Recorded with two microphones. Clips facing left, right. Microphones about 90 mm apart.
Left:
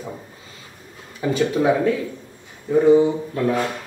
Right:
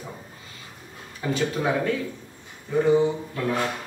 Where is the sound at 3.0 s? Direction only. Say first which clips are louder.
Left 5 dB; 15° left (ahead or behind).